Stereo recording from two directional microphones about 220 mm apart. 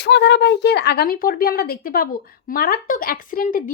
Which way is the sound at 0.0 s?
55° left (ahead or behind).